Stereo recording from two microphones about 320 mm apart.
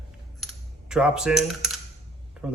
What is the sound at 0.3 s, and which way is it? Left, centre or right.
Coin, centre.